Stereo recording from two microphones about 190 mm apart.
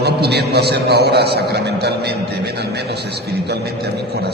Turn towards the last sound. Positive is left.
turn(degrees=-60)  # may be behind; listen again after turning